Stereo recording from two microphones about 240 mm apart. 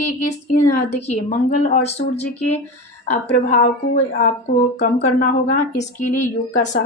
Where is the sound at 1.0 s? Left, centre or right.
Left.